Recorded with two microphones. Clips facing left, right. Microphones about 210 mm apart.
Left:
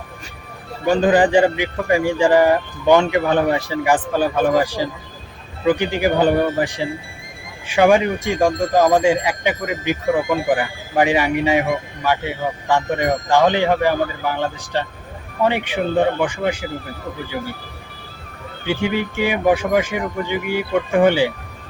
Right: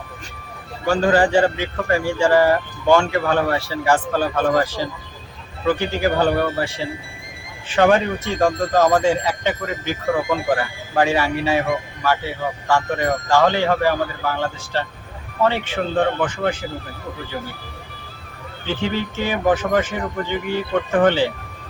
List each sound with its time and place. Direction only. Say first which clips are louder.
0.9 s a man's voice: left 2 dB; 15° left (ahead or behind)
10.2 s speech: left 2 dB; centre (ahead or behind)
10.5 s a man's voice: left 2 dB; 15° left (ahead or behind)
18.6 s a man's voice: left 3 dB; 10° left (ahead or behind)